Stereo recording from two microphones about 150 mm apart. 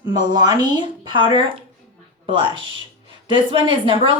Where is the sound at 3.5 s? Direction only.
35° right (ahead or behind).